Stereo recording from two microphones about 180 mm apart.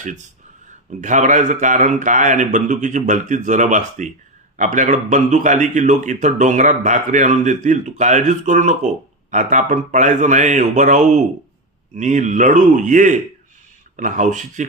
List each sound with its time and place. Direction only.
1.0 s speech: 40° right (ahead or behind)